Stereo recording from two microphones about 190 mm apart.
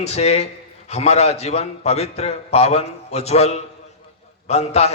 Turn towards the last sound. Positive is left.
turn(degrees=35)  # may be behind; listen again after turning